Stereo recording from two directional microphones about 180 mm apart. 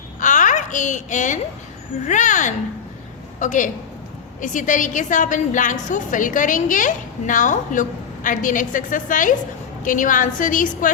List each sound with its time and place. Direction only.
0.2 s babbling: 45° left (ahead or behind)
2.0 s a woman's voice: 45° left (ahead or behind)